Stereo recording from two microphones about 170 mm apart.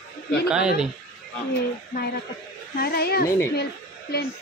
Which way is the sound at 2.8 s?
65° left (ahead or behind).